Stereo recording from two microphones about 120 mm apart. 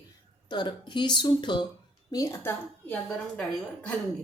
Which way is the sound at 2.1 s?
25° left (ahead or behind).